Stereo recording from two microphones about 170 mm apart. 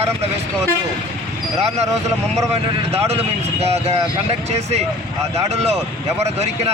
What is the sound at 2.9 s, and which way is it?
A man's voice, 40° right (ahead or behind).